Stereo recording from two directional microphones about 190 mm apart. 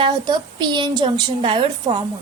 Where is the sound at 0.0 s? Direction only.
25° right (ahead or behind).